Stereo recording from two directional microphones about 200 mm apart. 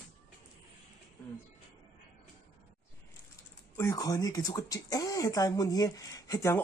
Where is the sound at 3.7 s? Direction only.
15° left (ahead or behind).